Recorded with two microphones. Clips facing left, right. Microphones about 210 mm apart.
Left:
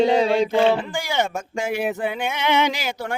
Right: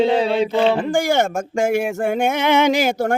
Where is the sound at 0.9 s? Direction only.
50° right (ahead or behind).